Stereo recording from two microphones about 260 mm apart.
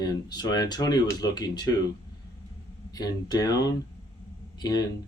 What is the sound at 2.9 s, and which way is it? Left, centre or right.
Speech, centre.